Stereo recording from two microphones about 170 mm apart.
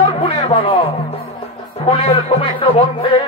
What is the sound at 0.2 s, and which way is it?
Music, 30° left (ahead or behind).